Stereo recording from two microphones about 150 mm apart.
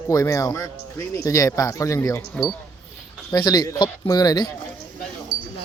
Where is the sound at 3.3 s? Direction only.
25° left (ahead or behind).